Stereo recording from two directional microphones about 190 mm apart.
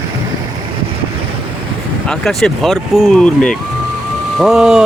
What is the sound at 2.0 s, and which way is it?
Speech, 5° left (ahead or behind).